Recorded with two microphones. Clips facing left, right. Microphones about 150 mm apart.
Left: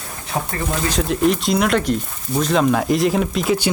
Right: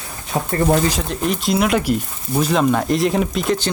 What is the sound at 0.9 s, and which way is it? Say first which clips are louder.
Speech: left 4 dB; centre (ahead or behind).